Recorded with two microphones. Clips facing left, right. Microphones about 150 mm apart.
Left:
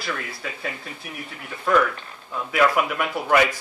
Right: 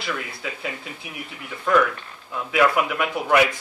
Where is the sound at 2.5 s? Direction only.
Centre (ahead or behind).